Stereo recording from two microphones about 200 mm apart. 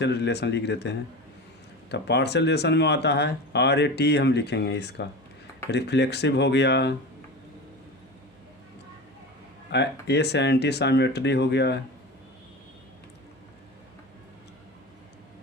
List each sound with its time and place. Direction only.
0.0 s speech: 55° left (ahead or behind)
9.7 s speech: 55° left (ahead or behind)